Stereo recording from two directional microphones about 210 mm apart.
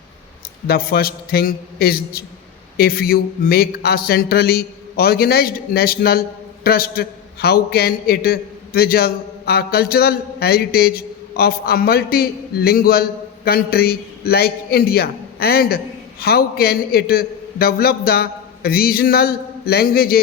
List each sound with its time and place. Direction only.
0.7 s a man's voice: 45° left (ahead or behind)